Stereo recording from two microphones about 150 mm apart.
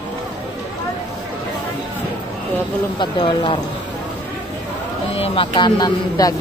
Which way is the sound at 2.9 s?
30° left (ahead or behind).